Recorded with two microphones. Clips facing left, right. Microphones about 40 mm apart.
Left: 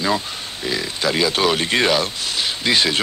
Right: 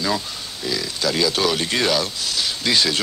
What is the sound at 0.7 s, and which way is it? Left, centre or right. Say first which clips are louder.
Speech: left 2 dB; left.